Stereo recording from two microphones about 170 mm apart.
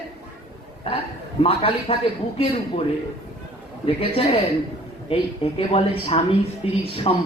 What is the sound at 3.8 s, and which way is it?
Speech, 35° left (ahead or behind).